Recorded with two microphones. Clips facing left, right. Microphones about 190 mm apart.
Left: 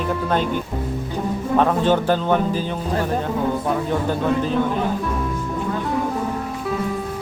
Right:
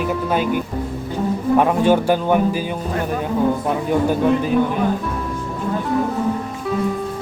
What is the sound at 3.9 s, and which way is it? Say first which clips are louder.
Speech: right 7 dB; 10° right (ahead or behind).